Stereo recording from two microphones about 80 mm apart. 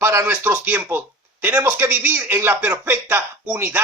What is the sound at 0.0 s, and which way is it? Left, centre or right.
A man's voice, right.